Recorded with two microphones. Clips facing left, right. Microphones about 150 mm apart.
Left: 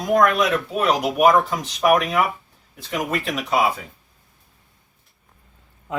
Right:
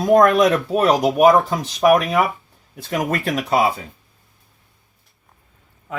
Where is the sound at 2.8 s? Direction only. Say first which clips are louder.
Right 3 dB; 45° right (ahead or behind).